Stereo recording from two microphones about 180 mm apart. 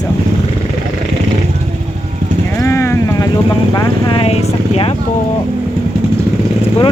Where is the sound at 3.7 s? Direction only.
20° left (ahead or behind).